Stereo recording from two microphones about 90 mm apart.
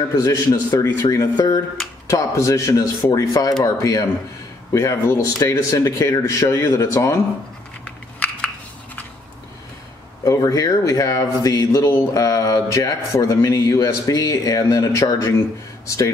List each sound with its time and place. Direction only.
0.2 s a man's voice: 40° left (ahead or behind)
7.8 s a sound: 15° left (ahead or behind)
10.2 s a man's voice: 35° left (ahead or behind)